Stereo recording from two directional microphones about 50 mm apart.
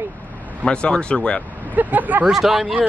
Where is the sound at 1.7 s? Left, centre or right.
Right.